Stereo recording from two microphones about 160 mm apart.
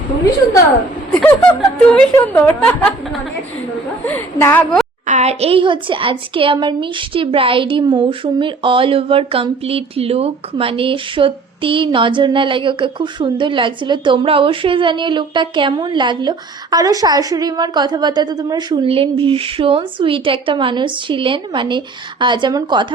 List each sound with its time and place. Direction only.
1.2 s speech: 5° left (ahead or behind)
4.0 s speech: 15° left (ahead or behind)
5.0 s a woman's voice: 45° right (ahead or behind); by 22.9 s 30° right (ahead or behind)